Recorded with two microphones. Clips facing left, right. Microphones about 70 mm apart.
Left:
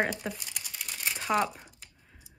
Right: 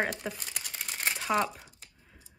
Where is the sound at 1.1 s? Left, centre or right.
Centre.